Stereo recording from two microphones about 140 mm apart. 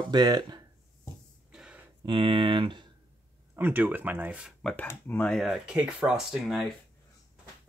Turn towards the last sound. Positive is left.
turn(degrees=0)  # may be behind; listen again after turning